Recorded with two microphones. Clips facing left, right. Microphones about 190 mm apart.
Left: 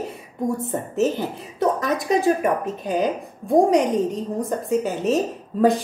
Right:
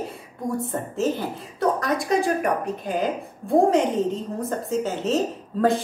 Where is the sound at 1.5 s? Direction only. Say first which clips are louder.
Left 1 dB; 20° left (ahead or behind).